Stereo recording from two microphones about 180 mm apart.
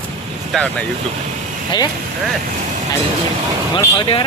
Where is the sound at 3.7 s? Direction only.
25° left (ahead or behind).